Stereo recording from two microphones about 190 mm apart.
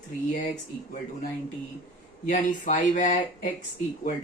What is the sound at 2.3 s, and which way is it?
Speech, 45° left (ahead or behind).